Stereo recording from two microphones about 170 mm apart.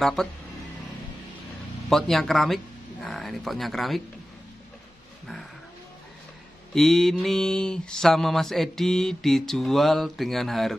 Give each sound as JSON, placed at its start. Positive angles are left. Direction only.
{"t": 0.0, "sound": "mantra", "side_deg": 0}
{"t": 1.9, "sound": "mantra", "side_deg": 0}
{"t": 6.7, "sound": "mantra", "side_deg": 0}